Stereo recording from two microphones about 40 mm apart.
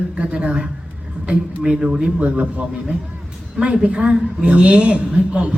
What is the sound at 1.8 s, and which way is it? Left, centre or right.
Speech, centre.